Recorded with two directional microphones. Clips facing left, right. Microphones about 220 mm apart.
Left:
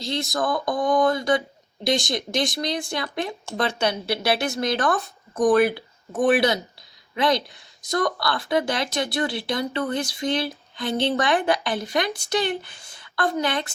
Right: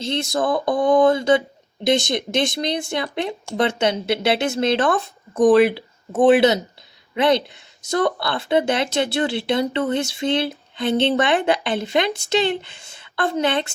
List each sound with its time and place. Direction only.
0.0 s speech: 25° right (ahead or behind)